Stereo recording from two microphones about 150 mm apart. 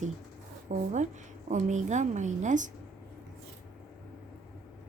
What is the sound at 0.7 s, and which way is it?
A woman's voice, 55° right (ahead or behind).